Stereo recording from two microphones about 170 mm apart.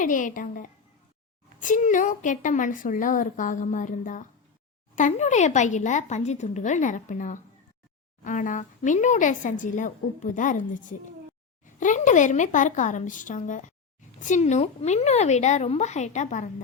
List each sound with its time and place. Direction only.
0.0 s a woman's voice: 50° left (ahead or behind)